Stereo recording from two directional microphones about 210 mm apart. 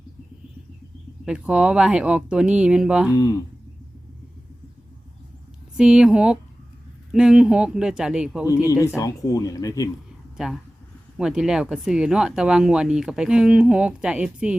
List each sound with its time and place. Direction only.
1.2 s speech: 5° right (ahead or behind)
3.1 s speech: 15° left (ahead or behind)
5.7 s speech: 5° right (ahead or behind)
8.6 s speech: 15° left (ahead or behind)
10.3 s speech: centre (ahead or behind)